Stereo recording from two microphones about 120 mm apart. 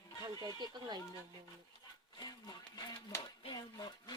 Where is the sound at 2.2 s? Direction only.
30° left (ahead or behind).